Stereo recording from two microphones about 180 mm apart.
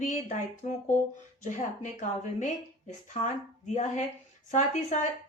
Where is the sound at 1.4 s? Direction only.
45° left (ahead or behind).